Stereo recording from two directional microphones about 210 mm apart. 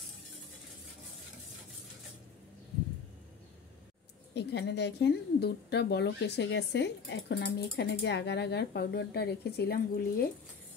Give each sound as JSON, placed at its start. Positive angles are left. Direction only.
{"t": 4.3, "sound": "a woman's voice", "side_deg": 55}